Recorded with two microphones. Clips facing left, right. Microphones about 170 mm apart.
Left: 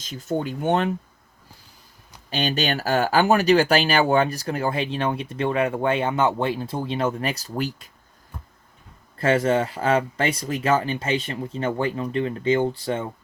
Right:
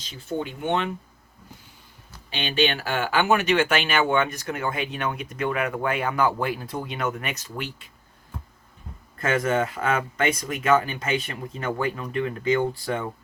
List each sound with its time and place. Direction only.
0.0 s speech: 45° left (ahead or behind)
2.3 s speech: 40° left (ahead or behind)
9.1 s speech: 30° left (ahead or behind)